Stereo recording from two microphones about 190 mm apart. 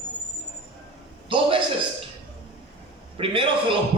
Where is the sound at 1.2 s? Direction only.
25° right (ahead or behind).